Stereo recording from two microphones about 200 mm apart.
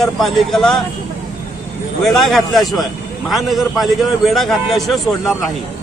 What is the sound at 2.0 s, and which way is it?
A man's voice, centre (ahead or behind).